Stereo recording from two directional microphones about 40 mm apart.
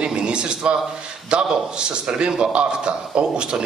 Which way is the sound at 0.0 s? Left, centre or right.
Right.